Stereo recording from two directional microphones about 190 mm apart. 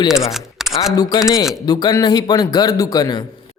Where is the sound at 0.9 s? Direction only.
20° left (ahead or behind).